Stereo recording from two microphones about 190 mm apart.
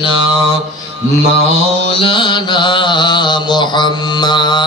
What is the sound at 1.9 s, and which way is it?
Mantra, 25° left (ahead or behind).